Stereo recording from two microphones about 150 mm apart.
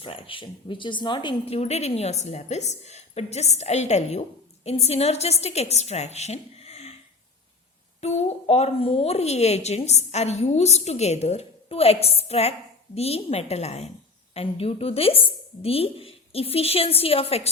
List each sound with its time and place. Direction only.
0.0 s a woman's voice: 35° left (ahead or behind)
8.0 s a woman's voice: 45° left (ahead or behind)